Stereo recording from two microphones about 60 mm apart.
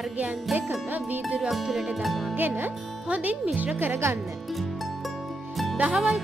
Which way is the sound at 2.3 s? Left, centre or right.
Right.